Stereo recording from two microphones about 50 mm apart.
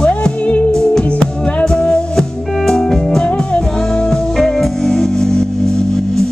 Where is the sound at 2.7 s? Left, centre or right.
Centre.